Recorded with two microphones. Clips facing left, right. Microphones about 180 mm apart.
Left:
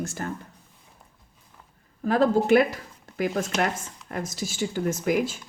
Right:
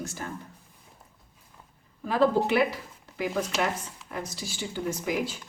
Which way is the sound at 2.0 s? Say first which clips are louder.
Left 3 dB; 45° left (ahead or behind).